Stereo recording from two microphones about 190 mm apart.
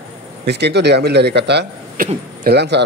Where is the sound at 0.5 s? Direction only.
60° right (ahead or behind).